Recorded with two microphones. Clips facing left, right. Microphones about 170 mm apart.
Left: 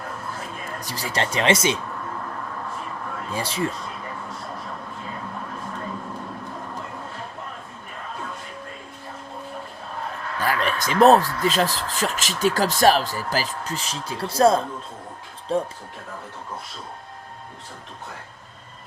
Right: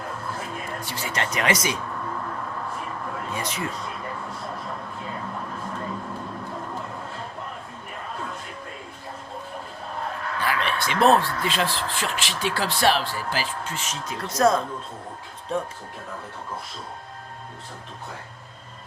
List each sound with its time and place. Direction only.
0.8 s speech: 40° left (ahead or behind)
3.3 s speech: 30° left (ahead or behind)
10.4 s speech: 40° left (ahead or behind)